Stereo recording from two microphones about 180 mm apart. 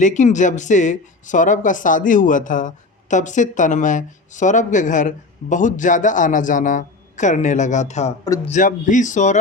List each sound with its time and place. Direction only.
0.0 s speech: 40° left (ahead or behind)